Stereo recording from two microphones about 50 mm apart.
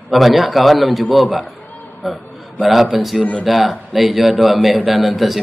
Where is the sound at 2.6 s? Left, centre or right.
Centre.